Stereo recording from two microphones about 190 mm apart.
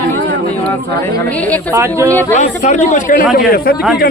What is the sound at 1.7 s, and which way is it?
Speech, 15° right (ahead or behind).